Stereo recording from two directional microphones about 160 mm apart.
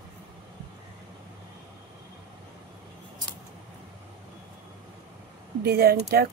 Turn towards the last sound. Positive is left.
turn(degrees=-75)  # may be behind; listen again after turning